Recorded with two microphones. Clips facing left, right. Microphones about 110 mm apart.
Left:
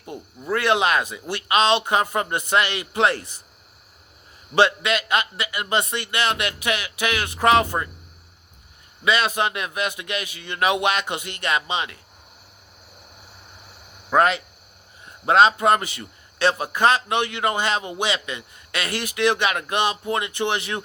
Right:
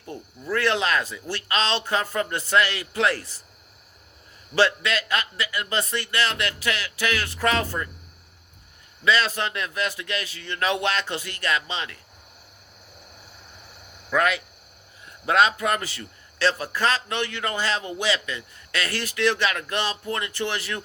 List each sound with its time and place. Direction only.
0.1 s a man's voice: 15° left (ahead or behind)
4.5 s a man's voice: 20° left (ahead or behind)
9.0 s a man's voice: 15° left (ahead or behind)
14.1 s a man's voice: 30° left (ahead or behind)